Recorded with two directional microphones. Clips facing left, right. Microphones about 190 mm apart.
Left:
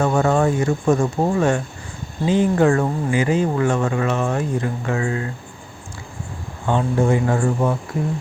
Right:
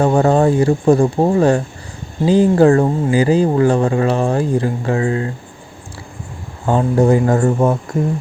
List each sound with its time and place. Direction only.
0.0 s speech: 35° right (ahead or behind)
6.7 s speech: 40° right (ahead or behind)